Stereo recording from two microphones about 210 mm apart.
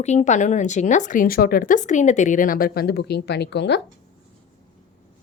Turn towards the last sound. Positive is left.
turn(degrees=55)  # may be behind; listen again after turning